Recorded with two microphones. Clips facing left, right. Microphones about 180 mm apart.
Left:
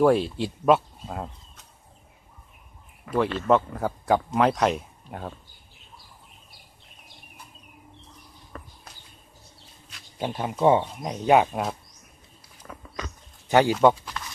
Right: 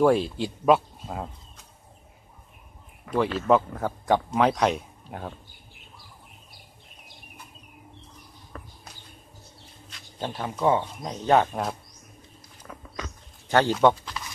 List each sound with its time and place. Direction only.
0.0 s speech: centre (ahead or behind)
3.1 s speech: centre (ahead or behind)
9.8 s speech: 5° left (ahead or behind)
13.5 s speech: 15° left (ahead or behind)